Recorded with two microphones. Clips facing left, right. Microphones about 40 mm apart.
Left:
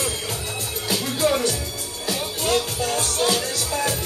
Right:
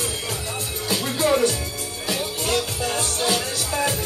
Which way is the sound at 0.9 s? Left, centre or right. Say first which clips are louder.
Left 1 dB; right.